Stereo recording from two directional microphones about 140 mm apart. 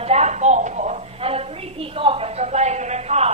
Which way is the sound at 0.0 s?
50° right (ahead or behind).